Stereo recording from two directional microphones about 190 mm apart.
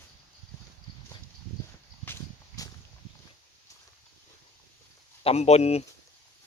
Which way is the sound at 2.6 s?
20° left (ahead or behind).